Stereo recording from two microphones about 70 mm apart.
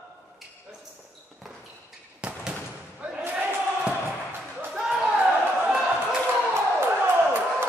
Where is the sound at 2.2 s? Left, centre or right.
Centre.